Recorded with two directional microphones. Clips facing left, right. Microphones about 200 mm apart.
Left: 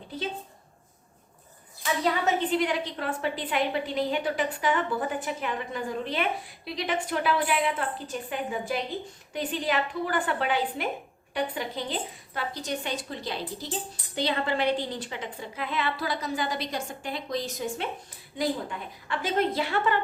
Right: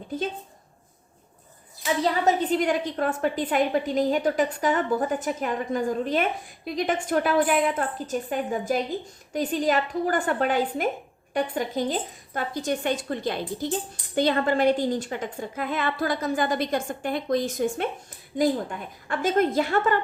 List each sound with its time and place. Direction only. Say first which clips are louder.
1.8 s a woman's voice: right 3 dB; 40° right (ahead or behind)
19.0 s a woman's voice: right 4 dB; 45° right (ahead or behind)